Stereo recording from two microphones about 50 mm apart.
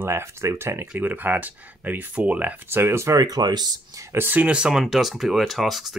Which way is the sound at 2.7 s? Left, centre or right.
Right.